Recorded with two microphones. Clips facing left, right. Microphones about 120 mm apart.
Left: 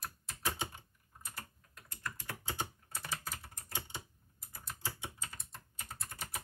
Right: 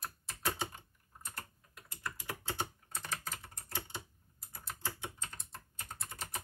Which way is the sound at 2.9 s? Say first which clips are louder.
Right 1 dB; 5° left (ahead or behind).